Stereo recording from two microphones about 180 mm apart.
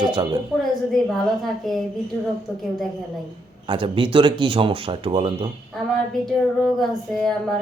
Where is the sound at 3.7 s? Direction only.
30° right (ahead or behind).